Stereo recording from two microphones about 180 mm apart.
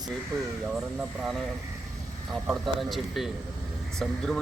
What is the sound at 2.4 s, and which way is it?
Speech, centre (ahead or behind).